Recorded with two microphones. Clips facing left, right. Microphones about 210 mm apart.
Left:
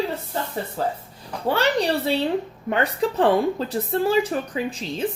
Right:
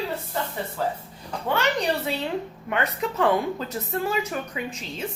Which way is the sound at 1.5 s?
35° left (ahead or behind).